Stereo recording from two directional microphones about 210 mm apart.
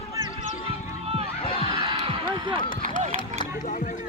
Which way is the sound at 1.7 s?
25° right (ahead or behind).